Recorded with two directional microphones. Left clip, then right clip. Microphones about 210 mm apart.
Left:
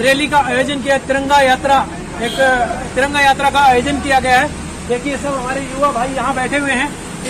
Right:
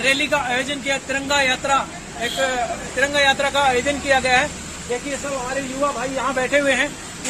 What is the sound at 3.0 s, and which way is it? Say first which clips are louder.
Speech: left 5 dB; 10° right (ahead or behind).